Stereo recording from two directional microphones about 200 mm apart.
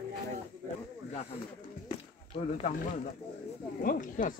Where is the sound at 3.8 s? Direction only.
45° left (ahead or behind).